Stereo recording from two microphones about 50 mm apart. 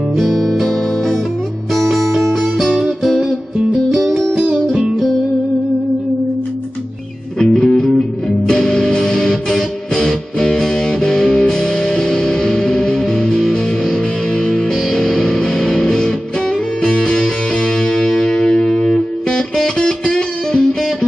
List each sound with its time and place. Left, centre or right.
0.2 s music: centre
7.3 s music: centre